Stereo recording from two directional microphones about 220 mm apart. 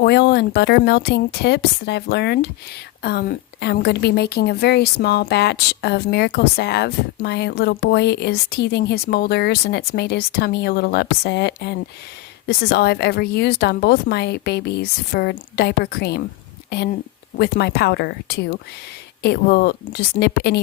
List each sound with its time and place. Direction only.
0.0 s a woman's voice: 50° left (ahead or behind)